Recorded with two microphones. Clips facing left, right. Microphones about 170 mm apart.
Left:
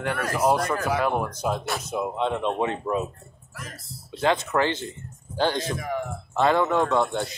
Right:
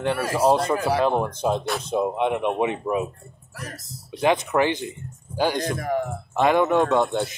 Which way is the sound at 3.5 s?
40° right (ahead or behind).